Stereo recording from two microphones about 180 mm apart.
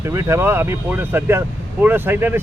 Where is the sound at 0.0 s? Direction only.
15° right (ahead or behind).